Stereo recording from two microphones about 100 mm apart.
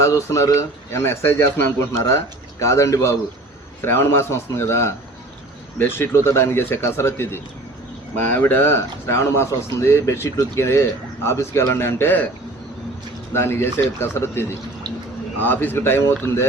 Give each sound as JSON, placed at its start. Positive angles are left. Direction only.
{"t": 0.0, "sound": "speech", "side_deg": 30}
{"t": 13.3, "sound": "speech", "side_deg": 25}